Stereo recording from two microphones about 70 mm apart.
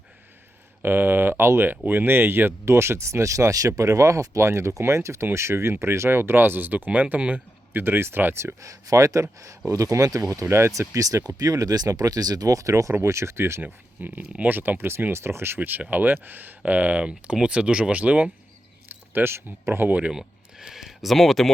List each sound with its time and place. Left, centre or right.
0.8 s speech: right
8.6 s speech: right
10.5 s speech: right
13.6 s speech: right
15.1 s speech: right; by 18.3 s centre
19.1 s speech: right
20.1 s a sound: centre